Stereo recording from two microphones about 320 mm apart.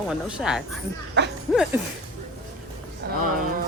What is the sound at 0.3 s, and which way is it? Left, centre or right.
Speech, centre.